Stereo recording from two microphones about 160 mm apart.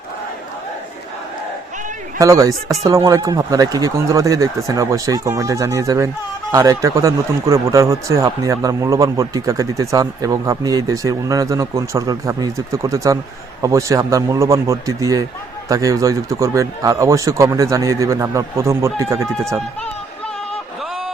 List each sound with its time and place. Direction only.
2.1 s speech: 20° right (ahead or behind)